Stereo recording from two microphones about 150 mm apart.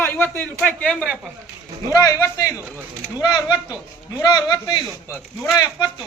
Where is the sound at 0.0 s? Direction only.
15° left (ahead or behind).